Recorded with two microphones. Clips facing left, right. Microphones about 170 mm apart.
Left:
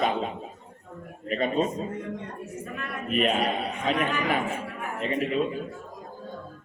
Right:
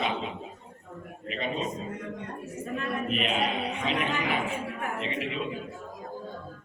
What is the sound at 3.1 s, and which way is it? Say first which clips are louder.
A man's voice: left 7 dB; 45° left (ahead or behind).